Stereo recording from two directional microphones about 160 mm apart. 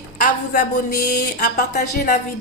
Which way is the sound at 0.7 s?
80° left.